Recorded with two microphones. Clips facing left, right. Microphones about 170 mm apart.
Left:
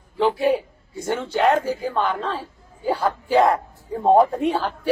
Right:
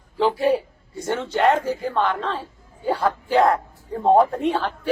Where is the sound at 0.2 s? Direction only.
Centre (ahead or behind).